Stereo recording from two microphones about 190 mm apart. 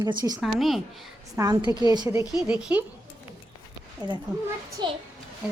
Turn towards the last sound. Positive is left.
turn(degrees=-25)  # may be behind; listen again after turning